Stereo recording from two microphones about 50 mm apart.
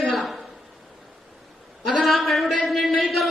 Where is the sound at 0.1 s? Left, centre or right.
Centre.